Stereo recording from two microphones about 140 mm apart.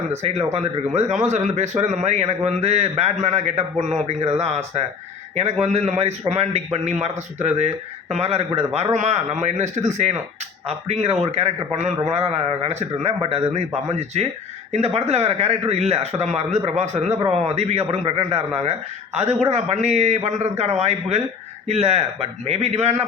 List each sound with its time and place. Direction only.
0.1 s a man's voice: 50° right (ahead or behind)